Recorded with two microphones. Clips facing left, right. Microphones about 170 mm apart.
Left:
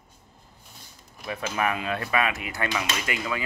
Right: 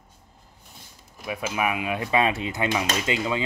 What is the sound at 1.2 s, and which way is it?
Speech, 10° right (ahead or behind).